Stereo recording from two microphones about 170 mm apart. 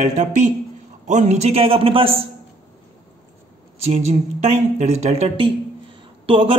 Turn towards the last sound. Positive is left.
turn(degrees=-30)  # may be behind; listen again after turning